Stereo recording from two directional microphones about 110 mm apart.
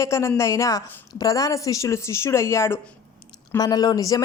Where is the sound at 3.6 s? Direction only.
40° left (ahead or behind).